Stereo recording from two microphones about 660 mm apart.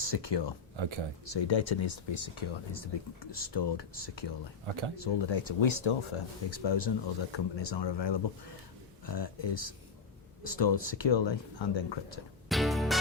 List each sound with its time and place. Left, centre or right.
0.0 s speech: left
0.8 s speech: right
1.2 s speech: left
12.5 s music: centre